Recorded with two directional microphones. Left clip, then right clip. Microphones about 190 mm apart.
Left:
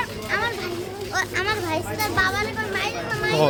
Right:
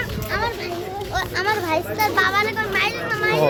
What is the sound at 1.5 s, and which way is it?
Speech, 25° right (ahead or behind).